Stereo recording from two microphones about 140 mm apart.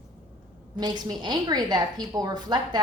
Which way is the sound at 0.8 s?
30° right (ahead or behind).